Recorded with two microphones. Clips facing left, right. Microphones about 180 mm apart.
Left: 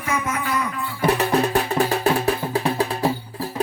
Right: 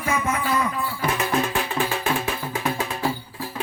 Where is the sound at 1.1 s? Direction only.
35° left (ahead or behind).